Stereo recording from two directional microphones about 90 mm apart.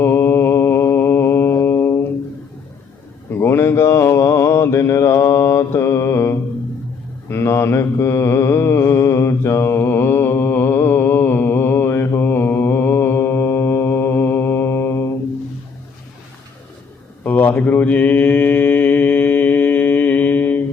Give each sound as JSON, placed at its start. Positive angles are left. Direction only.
{"t": 0.0, "sound": "mantra", "side_deg": 25}
{"t": 3.2, "sound": "mantra", "side_deg": 25}
{"t": 17.2, "sound": "mantra", "side_deg": 20}